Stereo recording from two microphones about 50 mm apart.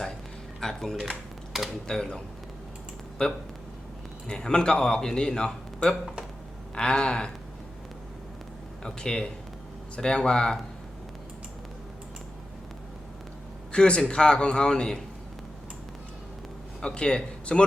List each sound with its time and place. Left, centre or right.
0.6 s a man's voice: centre
8.8 s a man's voice: centre
13.7 s a man's voice: left
16.8 s speech: centre